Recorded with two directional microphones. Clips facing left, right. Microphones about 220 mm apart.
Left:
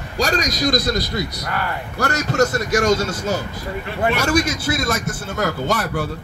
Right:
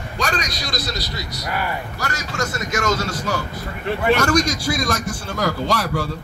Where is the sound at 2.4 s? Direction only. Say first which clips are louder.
Left 6 dB; 40° left (ahead or behind).